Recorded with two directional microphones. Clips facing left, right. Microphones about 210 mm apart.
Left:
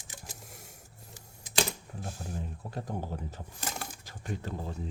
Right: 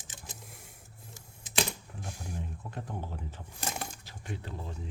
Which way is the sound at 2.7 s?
40° left (ahead or behind).